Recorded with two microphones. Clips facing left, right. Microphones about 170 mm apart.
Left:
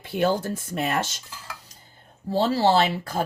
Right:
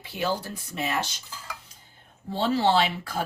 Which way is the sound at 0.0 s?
50° left (ahead or behind).